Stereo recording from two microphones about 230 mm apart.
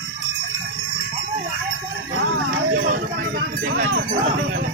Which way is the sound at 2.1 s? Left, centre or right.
Right.